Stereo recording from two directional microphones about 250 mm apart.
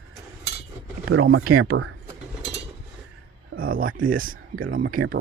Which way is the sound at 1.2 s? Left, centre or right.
Right.